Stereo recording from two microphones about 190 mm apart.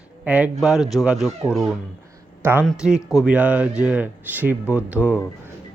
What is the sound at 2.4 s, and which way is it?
Speech, 10° right (ahead or behind).